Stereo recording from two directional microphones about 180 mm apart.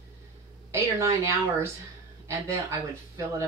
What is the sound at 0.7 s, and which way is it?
Speech, 15° right (ahead or behind).